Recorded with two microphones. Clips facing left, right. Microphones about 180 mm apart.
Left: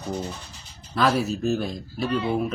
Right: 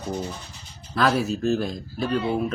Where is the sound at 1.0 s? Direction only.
Centre (ahead or behind).